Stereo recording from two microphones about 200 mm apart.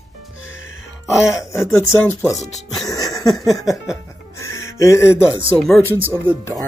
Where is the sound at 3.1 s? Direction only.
Centre (ahead or behind).